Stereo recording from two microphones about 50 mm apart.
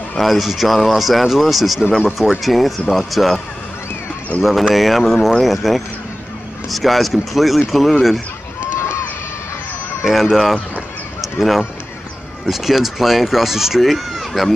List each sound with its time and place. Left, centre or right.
0.2 s speech: centre
4.4 s speech: centre
8.7 s run: left
10.3 s speech: centre
11.1 s honk: centre
12.4 s speech: centre